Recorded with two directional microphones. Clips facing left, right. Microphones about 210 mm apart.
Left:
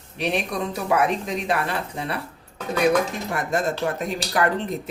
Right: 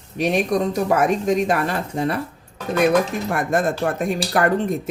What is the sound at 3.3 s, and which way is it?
Speech, 55° right (ahead or behind).